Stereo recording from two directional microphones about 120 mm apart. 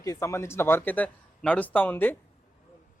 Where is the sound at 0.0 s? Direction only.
25° left (ahead or behind).